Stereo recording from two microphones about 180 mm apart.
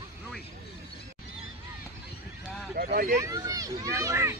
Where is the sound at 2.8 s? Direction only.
55° right (ahead or behind).